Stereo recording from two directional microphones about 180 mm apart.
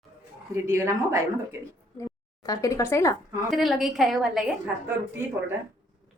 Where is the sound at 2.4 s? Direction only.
20° left (ahead or behind).